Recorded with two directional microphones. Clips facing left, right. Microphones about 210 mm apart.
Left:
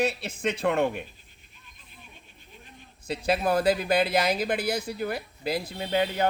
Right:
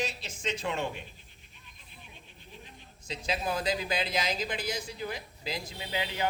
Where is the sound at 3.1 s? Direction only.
60° left (ahead or behind).